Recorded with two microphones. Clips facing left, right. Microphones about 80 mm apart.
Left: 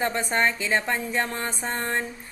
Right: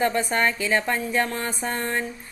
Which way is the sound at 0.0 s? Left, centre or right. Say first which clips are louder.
Right 2 dB; left.